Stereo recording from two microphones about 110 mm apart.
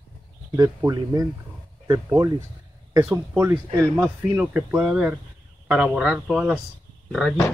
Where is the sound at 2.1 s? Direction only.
25° right (ahead or behind); by 7.4 s centre (ahead or behind).